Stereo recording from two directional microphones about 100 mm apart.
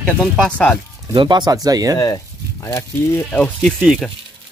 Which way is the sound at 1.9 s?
40° left (ahead or behind).